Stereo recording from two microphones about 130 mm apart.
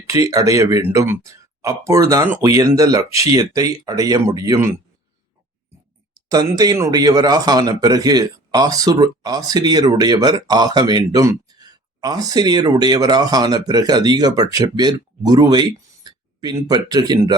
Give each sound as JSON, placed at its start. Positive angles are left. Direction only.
{"t": 0.1, "sound": "speech", "side_deg": -25}
{"t": 6.1, "sound": "speech", "side_deg": -30}